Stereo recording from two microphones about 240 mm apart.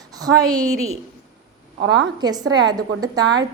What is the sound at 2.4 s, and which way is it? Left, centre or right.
Speech, right.